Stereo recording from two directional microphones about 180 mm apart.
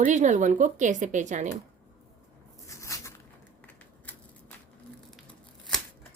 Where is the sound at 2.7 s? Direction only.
15° left (ahead or behind).